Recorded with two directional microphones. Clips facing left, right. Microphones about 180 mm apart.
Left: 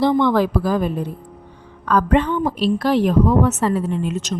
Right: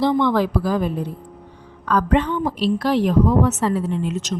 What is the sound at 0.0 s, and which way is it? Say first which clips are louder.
Speech: left 2 dB; 50° left (ahead or behind).